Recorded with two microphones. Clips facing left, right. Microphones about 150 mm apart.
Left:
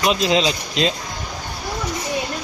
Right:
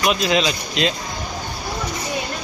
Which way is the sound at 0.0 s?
25° left (ahead or behind).